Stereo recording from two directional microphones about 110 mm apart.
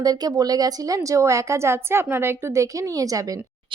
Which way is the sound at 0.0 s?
35° right (ahead or behind).